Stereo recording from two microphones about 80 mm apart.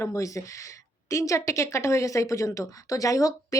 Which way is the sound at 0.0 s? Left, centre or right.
Left.